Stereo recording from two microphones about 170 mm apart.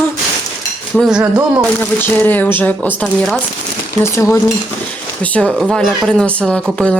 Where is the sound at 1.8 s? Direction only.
10° left (ahead or behind).